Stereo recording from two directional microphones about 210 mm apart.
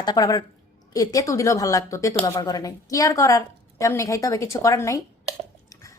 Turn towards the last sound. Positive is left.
turn(degrees=15)  # may be behind; listen again after turning